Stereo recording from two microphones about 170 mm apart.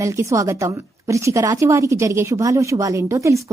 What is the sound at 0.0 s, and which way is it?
A woman's voice, 15° right (ahead or behind).